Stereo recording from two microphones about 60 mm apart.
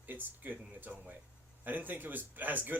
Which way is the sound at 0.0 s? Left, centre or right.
Right.